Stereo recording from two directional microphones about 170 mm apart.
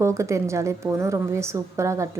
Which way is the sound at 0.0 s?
15° right (ahead or behind).